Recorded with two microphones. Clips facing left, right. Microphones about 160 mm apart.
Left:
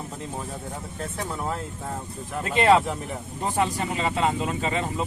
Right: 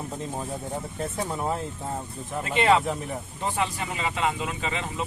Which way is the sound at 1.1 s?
25° right (ahead or behind).